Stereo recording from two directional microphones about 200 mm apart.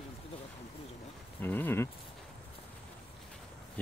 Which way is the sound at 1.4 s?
10° left (ahead or behind).